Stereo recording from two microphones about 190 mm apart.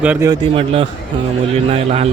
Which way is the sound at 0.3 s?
30° right (ahead or behind).